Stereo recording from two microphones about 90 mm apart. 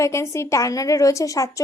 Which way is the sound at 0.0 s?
30° left (ahead or behind).